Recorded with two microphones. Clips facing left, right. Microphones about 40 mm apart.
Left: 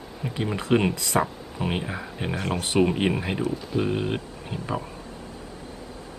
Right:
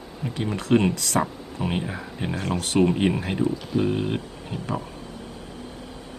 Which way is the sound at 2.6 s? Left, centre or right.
Centre.